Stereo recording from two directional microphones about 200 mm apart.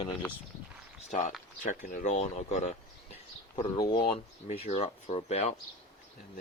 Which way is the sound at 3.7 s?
20° left (ahead or behind).